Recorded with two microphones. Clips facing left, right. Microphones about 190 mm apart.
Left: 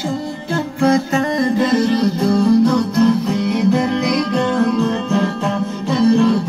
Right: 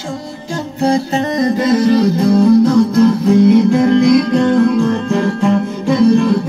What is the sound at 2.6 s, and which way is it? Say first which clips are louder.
Music: right 4 dB; 45° right (ahead or behind).